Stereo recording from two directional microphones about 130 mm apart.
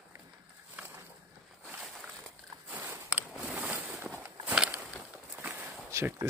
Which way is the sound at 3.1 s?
10° right (ahead or behind).